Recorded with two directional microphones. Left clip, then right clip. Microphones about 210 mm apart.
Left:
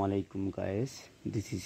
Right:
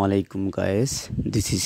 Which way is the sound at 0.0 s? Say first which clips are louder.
Right 10 dB; 40° right (ahead or behind).